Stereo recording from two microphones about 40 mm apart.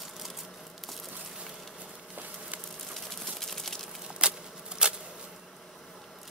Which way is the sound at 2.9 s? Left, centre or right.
Centre.